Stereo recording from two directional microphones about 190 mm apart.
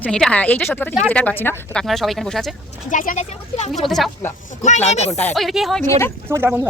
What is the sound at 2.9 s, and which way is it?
Speech, 45° left (ahead or behind).